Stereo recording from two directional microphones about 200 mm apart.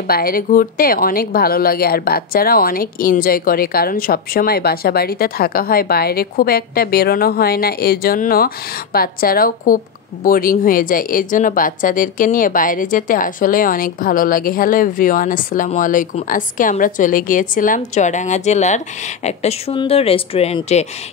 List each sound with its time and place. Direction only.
0.0 s speech: 45° left (ahead or behind); by 20.8 s 30° left (ahead or behind)